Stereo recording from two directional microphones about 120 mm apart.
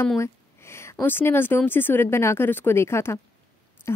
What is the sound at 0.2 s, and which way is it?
Speech, 20° left (ahead or behind).